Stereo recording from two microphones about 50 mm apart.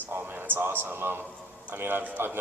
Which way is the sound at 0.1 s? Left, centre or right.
Right.